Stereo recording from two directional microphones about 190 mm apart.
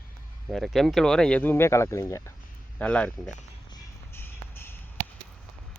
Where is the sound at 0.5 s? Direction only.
Centre (ahead or behind).